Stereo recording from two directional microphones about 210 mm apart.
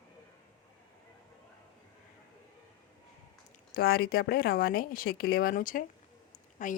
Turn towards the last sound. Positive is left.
turn(degrees=40)  # may be behind; listen again after turning